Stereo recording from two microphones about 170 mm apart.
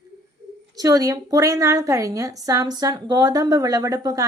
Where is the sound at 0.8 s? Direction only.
20° right (ahead or behind).